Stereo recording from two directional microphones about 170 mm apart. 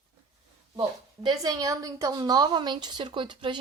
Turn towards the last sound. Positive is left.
turn(degrees=-30)  # may be behind; listen again after turning